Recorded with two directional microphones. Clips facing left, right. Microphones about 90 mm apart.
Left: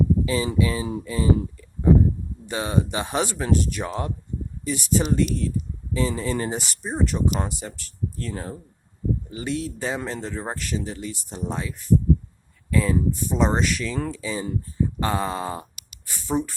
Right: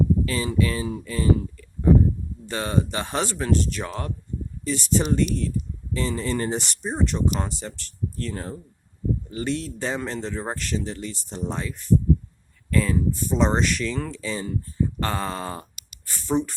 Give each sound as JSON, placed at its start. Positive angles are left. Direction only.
{"t": 0.3, "sound": "speech", "side_deg": 15}